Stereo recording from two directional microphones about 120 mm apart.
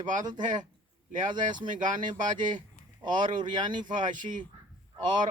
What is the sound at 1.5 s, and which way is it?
Speech, 40° right (ahead or behind).